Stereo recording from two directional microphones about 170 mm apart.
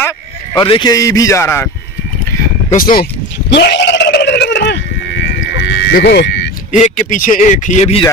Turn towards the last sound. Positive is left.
turn(degrees=40)  # may be behind; listen again after turning